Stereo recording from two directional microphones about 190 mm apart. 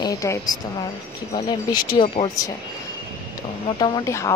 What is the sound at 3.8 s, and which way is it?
Speech, 20° left (ahead or behind).